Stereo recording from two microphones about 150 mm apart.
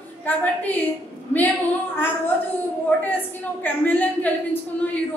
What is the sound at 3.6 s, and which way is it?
Speech, 10° left (ahead or behind).